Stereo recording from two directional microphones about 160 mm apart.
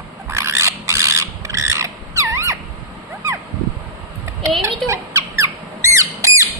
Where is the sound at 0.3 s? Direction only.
15° right (ahead or behind).